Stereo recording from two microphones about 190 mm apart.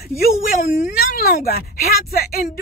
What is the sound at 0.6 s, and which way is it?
Speech, 50° left (ahead or behind).